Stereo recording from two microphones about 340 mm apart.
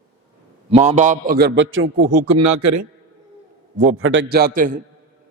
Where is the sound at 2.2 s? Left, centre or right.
Right.